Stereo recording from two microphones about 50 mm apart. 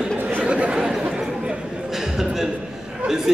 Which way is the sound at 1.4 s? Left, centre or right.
Centre.